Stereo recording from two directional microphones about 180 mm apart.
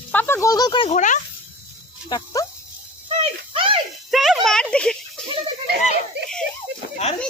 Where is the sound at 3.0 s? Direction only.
30° right (ahead or behind).